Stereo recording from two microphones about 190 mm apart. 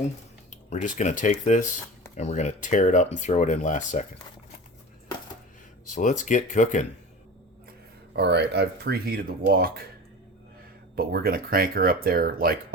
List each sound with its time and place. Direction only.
0.7 s speech: 40° left (ahead or behind)
5.9 s speech: 40° left (ahead or behind)
8.1 s speech: 60° right (ahead or behind)
10.9 s speech: 50° right (ahead or behind)